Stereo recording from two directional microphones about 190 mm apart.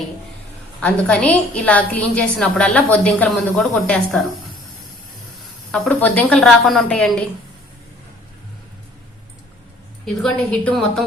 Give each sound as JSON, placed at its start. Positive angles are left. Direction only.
{"t": 0.8, "sound": "a woman's voice", "side_deg": 5}
{"t": 5.7, "sound": "a woman's voice", "side_deg": 5}
{"t": 10.2, "sound": "a woman's voice", "side_deg": 5}